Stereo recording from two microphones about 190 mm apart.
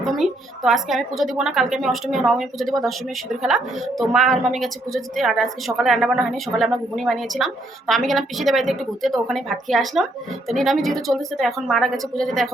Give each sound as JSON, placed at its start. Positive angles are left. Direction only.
{"t": 0.0, "sound": "a woman's voice", "side_deg": 0}